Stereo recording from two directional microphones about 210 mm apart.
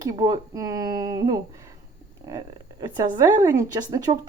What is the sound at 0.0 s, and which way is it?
A woman's voice, 15° right (ahead or behind).